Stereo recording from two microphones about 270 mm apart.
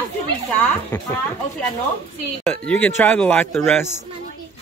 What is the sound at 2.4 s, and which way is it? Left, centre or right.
Speech, centre.